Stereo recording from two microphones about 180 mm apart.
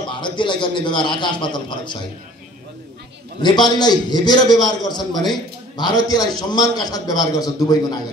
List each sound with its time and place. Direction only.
0.1 s a man's voice: 25° left (ahead or behind)
3.4 s a man's voice: 25° left (ahead or behind)